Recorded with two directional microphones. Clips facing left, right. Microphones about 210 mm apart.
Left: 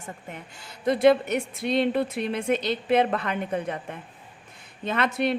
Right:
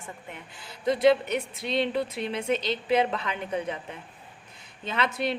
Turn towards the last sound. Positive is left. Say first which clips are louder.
# left 4 dB
turn(degrees=55)  # may be behind; listen again after turning